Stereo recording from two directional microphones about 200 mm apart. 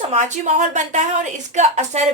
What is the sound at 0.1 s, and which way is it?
A woman's voice, 35° right (ahead or behind).